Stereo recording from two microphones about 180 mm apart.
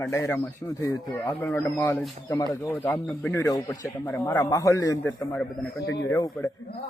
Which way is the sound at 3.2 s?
15° left (ahead or behind).